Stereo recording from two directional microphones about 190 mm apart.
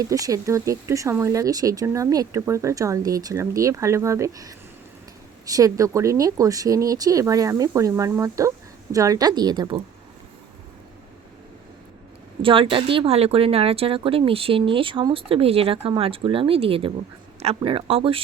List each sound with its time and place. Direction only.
0.0 s speech: 20° right (ahead or behind)
12.4 s a woman's voice: 25° right (ahead or behind)